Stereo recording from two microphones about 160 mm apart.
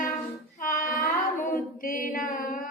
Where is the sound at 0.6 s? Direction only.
55° left (ahead or behind).